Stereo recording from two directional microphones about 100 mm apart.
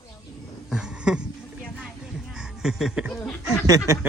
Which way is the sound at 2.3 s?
5° right (ahead or behind).